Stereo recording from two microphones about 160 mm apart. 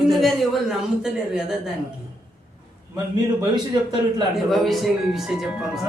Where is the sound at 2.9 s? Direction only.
25° right (ahead or behind).